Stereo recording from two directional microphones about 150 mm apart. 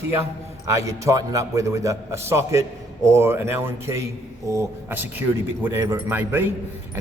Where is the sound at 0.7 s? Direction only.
20° right (ahead or behind).